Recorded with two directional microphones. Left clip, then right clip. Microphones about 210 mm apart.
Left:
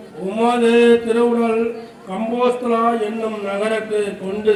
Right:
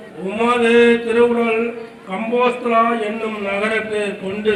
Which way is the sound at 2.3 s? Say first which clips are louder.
Right 2 dB; 55° left (ahead or behind).